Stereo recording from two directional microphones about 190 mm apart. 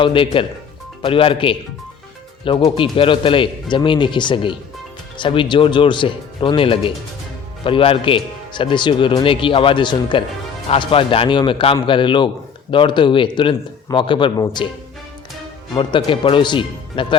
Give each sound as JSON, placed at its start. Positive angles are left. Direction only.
{"t": 0.0, "sound": "speech", "side_deg": 25}
{"t": 2.6, "sound": "speech", "side_deg": 25}
{"t": 15.7, "sound": "speech", "side_deg": 20}